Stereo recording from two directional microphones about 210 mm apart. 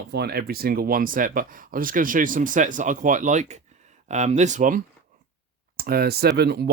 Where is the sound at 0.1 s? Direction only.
50° right (ahead or behind).